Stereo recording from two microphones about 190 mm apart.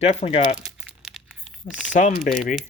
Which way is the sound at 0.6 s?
5° right (ahead or behind).